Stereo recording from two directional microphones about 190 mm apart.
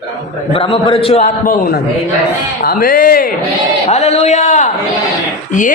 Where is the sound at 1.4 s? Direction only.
50° left (ahead or behind).